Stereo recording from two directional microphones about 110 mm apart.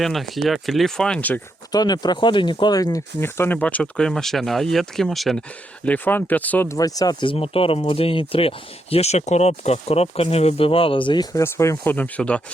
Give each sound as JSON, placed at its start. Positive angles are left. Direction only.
{"t": 0.0, "sound": "speech", "side_deg": 0}
{"t": 1.7, "sound": "speech", "side_deg": 40}
{"t": 3.2, "sound": "speech", "side_deg": 20}
{"t": 5.8, "sound": "speech", "side_deg": 15}
{"t": 6.7, "sound": "speech", "side_deg": 35}
{"t": 11.3, "sound": "speech", "side_deg": 25}
{"t": 11.9, "sound": "speech", "side_deg": 15}